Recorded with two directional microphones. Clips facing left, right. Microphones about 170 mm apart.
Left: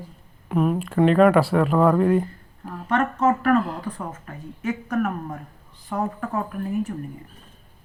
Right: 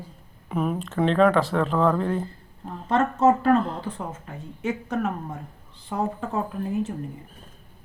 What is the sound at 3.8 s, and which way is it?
A woman's voice, 25° right (ahead or behind).